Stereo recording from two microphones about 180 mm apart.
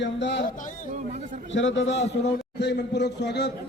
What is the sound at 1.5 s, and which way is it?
A man's voice, 90° left.